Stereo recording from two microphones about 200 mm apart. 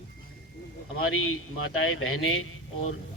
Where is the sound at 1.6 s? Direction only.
85° left.